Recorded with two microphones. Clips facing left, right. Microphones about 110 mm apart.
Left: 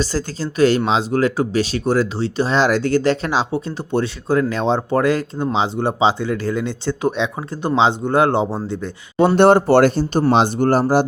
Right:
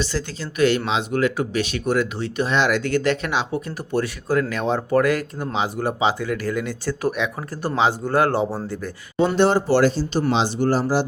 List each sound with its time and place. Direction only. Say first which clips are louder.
0.0 s speech: left 4 dB; 40° left (ahead or behind); by 8.9 s 20° left (ahead or behind)
9.1 s speech: left 6 dB; 55° left (ahead or behind)